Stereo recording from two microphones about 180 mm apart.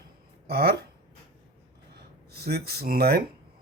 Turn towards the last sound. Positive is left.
turn(degrees=-60)  # may be behind; listen again after turning